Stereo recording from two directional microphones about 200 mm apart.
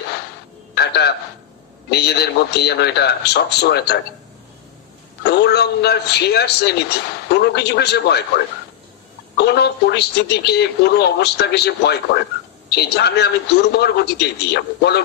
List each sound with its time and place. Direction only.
0.7 s a sound: 55° left (ahead or behind)
1.9 s speech: 55° left (ahead or behind)
5.2 s speech: 55° left (ahead or behind)
9.4 s speech: 55° left (ahead or behind)